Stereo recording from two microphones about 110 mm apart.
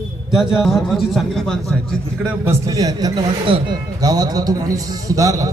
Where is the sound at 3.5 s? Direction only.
55° right (ahead or behind).